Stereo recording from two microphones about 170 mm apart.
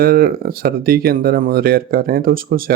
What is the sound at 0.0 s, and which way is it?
Speech, 60° right (ahead or behind).